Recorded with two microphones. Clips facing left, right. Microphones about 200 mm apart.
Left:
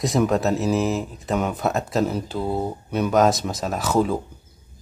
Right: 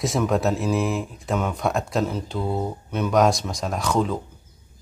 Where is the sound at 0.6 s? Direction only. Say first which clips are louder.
Left 2 dB; 40° left (ahead or behind).